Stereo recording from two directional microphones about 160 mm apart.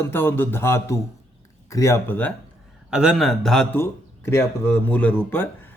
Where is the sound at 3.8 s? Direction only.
15° left (ahead or behind).